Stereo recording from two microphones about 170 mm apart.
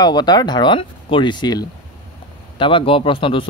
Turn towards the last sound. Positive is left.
turn(degrees=30)  # may be behind; listen again after turning